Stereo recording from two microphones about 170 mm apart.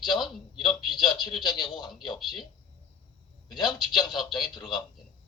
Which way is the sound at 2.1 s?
Centre (ahead or behind).